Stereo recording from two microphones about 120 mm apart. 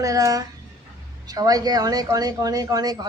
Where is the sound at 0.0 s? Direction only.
30° right (ahead or behind).